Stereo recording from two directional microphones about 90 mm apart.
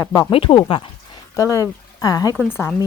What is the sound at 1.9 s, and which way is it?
Speech, 40° left (ahead or behind).